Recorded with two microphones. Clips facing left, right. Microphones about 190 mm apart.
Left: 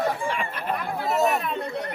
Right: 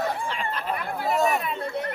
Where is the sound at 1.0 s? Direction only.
Centre (ahead or behind).